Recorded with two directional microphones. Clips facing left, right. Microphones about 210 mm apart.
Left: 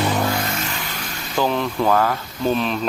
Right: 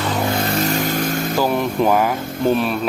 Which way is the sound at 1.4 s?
10° right (ahead or behind).